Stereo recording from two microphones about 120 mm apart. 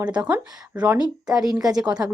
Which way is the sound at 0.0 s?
10° right (ahead or behind).